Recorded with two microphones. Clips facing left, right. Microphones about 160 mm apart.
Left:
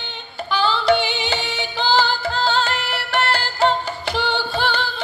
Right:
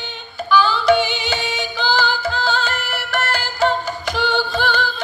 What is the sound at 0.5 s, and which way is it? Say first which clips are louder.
Music: right 3 dB; 45° right (ahead or behind).